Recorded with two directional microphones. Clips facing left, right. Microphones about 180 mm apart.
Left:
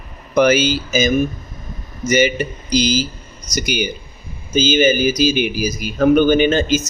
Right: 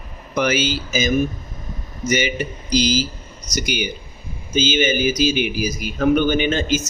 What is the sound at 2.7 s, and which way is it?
Speech, 55° left (ahead or behind).